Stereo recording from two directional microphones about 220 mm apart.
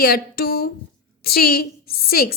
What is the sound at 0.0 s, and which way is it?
A woman's voice, 45° left (ahead or behind).